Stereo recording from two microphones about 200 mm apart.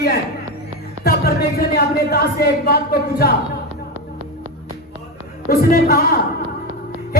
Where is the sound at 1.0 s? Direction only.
50° left (ahead or behind).